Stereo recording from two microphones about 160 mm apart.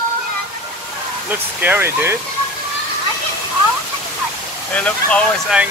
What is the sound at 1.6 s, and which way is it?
Speech, 15° right (ahead or behind).